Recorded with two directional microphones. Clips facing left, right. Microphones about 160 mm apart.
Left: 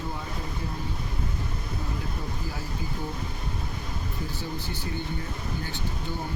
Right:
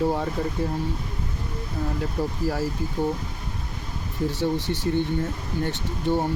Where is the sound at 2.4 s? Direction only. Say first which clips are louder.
Right 11 dB; 75° right (ahead or behind).